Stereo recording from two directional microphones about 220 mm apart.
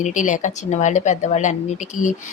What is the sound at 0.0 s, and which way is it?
Speech, 35° left (ahead or behind).